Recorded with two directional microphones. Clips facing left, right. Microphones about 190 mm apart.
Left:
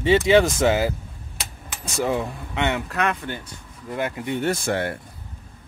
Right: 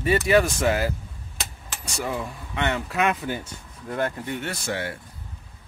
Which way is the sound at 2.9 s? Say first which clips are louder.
Right 1 dB; 5° right (ahead or behind).